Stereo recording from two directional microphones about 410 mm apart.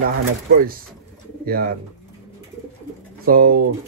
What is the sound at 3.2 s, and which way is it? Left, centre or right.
Speech, right.